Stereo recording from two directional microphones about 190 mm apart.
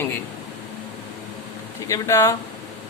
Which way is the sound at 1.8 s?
15° left (ahead or behind).